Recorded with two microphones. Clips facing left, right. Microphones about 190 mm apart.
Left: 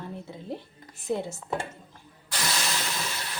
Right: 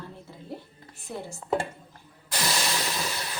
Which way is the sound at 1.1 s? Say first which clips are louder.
Left 8 dB; 20° left (ahead or behind).